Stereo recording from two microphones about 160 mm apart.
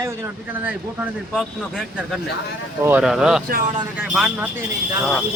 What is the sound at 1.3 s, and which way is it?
A man's voice, centre (ahead or behind).